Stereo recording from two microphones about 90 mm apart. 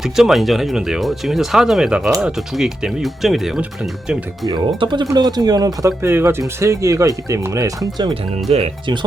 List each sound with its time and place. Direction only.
0.0 s speech: 5° right (ahead or behind)
4.4 s speech: 60° right (ahead or behind)
5.1 s speech: 50° right (ahead or behind)
6.0 s speech: 30° right (ahead or behind); by 8.1 s 45° right (ahead or behind)